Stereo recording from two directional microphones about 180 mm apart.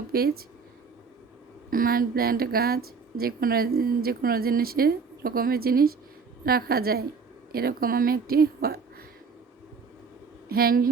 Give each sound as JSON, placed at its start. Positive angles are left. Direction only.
{"t": 0.1, "sound": "speech", "side_deg": -55}
{"t": 1.7, "sound": "a woman's voice", "side_deg": -55}
{"t": 10.5, "sound": "a woman's voice", "side_deg": -55}